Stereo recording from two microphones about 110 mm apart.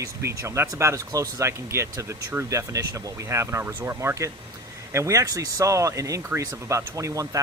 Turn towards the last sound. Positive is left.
turn(degrees=-30)  # may be behind; listen again after turning